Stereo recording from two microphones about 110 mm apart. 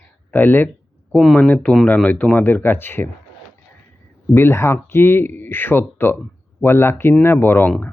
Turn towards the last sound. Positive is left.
turn(degrees=20)  # may be behind; listen again after turning